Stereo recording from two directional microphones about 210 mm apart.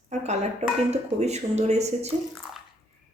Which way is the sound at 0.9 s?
30° right (ahead or behind).